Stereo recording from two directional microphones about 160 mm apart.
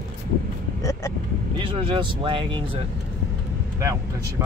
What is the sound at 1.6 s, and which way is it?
Speech, 35° right (ahead or behind).